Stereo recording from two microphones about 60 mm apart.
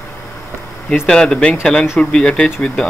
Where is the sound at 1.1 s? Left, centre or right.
Centre.